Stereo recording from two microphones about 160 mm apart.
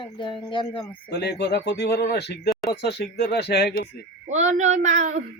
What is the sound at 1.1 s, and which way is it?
Speech, 90° left.